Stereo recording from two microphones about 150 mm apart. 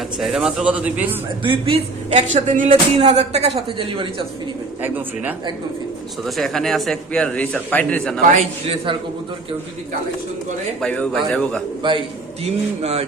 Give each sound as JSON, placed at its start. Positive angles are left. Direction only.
{"t": 0.2, "sound": "speech", "side_deg": 0}
{"t": 1.5, "sound": "speech", "side_deg": -35}
{"t": 2.1, "sound": "speech", "side_deg": -55}
{"t": 2.6, "sound": "speech", "side_deg": -45}
{"t": 4.8, "sound": "speech", "side_deg": -10}
{"t": 6.2, "sound": "a man's voice", "side_deg": 0}
{"t": 8.2, "sound": "speech", "side_deg": -55}
{"t": 10.8, "sound": "a man's voice", "side_deg": 5}
{"t": 11.8, "sound": "speech", "side_deg": -35}
{"t": 12.8, "sound": "a sound", "side_deg": -45}